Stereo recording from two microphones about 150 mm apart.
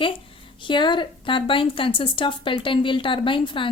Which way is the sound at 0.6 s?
30° left (ahead or behind).